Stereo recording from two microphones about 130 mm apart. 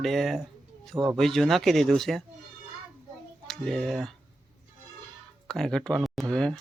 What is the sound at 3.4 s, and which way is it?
Speech, 5° left (ahead or behind).